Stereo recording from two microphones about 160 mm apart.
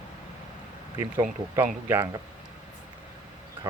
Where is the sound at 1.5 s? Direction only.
15° right (ahead or behind).